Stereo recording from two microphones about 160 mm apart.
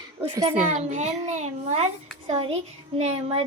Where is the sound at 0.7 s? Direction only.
50° right (ahead or behind).